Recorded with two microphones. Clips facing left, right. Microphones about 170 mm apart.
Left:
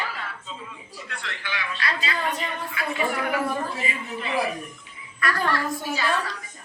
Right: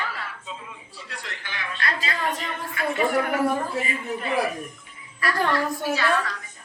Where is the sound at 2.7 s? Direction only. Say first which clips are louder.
Right 6 dB; 45° right (ahead or behind).